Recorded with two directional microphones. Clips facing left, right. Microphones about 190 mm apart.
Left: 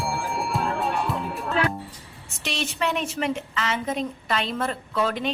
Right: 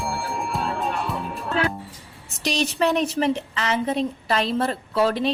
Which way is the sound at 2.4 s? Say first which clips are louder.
Right 6 dB; 40° right (ahead or behind).